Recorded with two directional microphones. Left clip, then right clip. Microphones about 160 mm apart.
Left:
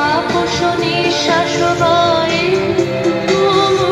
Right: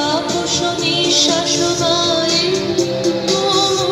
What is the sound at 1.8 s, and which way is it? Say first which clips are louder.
Music: left 6 dB; 60° right (ahead or behind).